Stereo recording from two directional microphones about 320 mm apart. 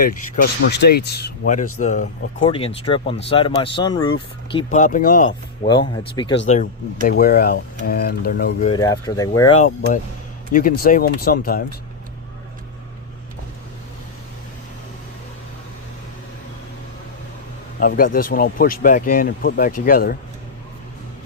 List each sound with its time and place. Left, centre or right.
0.7 s speech: left
5.6 s speech: centre
6.5 s speech: left
8.7 s speech: centre; by 11.6 s left
17.7 s speech: left